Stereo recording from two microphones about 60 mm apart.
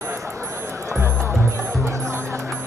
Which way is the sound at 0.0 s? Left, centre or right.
Right.